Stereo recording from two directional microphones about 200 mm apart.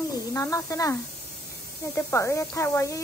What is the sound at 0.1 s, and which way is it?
Speech, 15° left (ahead or behind).